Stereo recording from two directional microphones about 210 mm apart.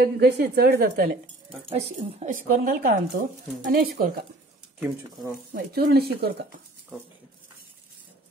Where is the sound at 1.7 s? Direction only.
35° right (ahead or behind).